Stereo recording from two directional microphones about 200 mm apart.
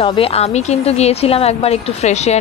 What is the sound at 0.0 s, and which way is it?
A woman's voice, 25° left (ahead or behind).